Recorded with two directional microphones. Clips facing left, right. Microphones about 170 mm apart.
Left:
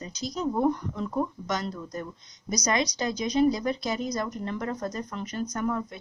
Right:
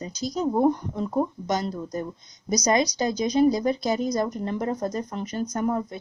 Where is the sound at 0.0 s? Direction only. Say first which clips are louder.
Right 4 dB; 35° right (ahead or behind).